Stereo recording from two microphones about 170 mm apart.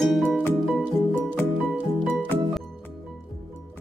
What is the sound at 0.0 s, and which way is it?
Music, centre (ahead or behind).